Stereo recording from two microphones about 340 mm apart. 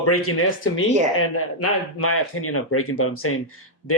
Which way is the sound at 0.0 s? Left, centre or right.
Left.